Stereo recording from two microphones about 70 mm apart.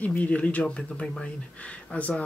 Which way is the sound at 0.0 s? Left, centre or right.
Left.